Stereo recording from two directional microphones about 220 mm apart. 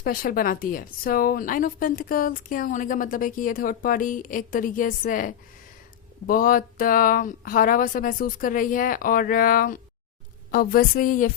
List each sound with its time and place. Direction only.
0.0 s speech: 40° left (ahead or behind)